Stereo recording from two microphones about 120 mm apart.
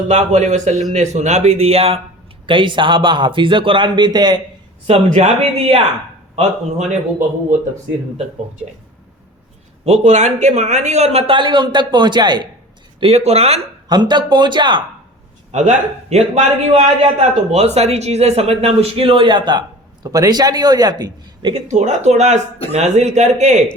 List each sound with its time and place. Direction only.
0.1 s a man's voice: 75° right (ahead or behind); by 2.0 s 55° right (ahead or behind)
2.5 s a man's voice: 45° right (ahead or behind)
4.9 s a man's voice: 65° right (ahead or behind)
6.3 s a man's voice: 75° right (ahead or behind)
9.8 s a man's voice: 75° right (ahead or behind); by 12.5 s 40° right (ahead or behind)
13.0 s a man's voice: 60° right (ahead or behind)
13.8 s speech: 40° right (ahead or behind)
15.5 s a man's voice: 75° right (ahead or behind); by 21.5 s 35° right (ahead or behind)
21.5 s a man's voice: 70° right (ahead or behind)